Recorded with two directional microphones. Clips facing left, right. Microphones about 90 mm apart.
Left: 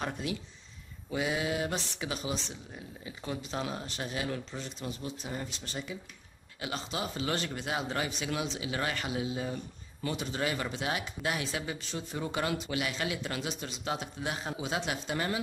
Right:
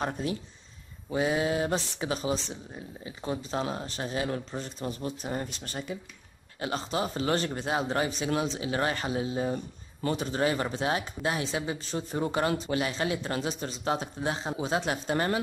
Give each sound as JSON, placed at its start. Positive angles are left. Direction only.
{"t": 0.0, "sound": "speech", "side_deg": -35}
{"t": 14.6, "sound": "speech", "side_deg": -40}